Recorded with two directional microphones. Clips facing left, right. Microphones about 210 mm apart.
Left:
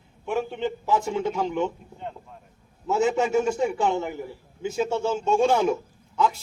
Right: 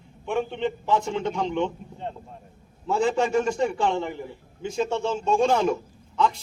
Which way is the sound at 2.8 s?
5° left (ahead or behind).